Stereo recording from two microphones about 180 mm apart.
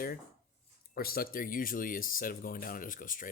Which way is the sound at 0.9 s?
55° left (ahead or behind).